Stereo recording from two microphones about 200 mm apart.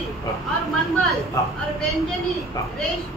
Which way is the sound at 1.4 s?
15° left (ahead or behind).